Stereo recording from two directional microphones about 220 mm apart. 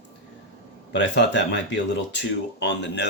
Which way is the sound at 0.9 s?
55° left (ahead or behind).